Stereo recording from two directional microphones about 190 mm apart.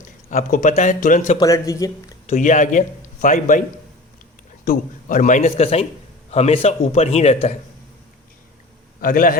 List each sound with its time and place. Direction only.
0.3 s a man's voice: 40° left (ahead or behind)
1.4 s speech: 15° left (ahead or behind)
2.2 s speech: 40° left (ahead or behind)
4.6 s a man's voice: 45° left (ahead or behind)
9.0 s a man's voice: 45° left (ahead or behind)